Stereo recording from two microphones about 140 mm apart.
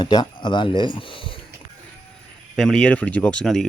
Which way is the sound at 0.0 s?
30° left (ahead or behind).